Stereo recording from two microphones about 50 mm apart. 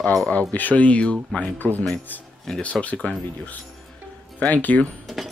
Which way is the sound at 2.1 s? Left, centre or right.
Left.